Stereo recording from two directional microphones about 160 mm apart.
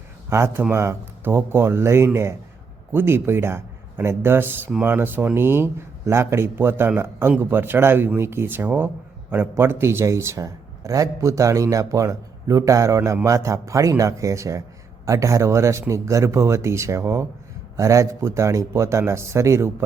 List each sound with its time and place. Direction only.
0.3 s a man's voice: 15° right (ahead or behind)